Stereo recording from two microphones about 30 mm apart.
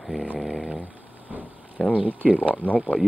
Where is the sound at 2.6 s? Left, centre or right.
Right.